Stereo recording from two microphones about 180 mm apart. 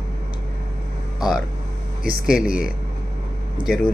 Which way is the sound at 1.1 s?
Centre (ahead or behind).